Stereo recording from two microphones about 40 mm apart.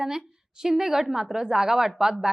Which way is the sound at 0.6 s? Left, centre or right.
Centre.